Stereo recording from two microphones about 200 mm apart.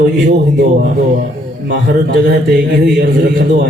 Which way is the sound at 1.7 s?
55° right (ahead or behind).